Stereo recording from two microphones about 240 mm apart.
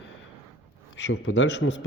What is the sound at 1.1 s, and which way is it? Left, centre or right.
Speech, left.